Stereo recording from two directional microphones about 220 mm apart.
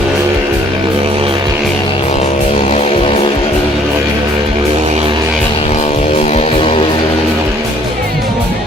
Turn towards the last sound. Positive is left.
turn(degrees=25)  # may be behind; listen again after turning